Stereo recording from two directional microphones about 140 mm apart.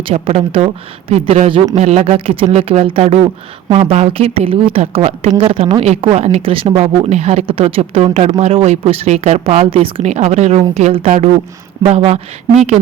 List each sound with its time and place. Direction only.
0.0 s speech: 45° right (ahead or behind)
1.7 s speech: 55° right (ahead or behind)
9.6 s speech: 40° right (ahead or behind)